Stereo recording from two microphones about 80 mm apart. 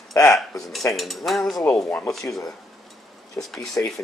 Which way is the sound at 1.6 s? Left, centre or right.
Left.